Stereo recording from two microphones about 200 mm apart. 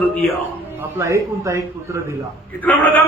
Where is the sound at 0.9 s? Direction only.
15° right (ahead or behind).